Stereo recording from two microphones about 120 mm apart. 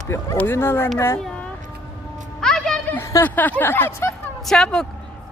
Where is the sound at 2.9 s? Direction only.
20° left (ahead or behind).